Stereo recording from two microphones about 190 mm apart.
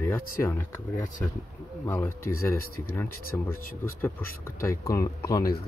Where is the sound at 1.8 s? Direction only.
15° left (ahead or behind).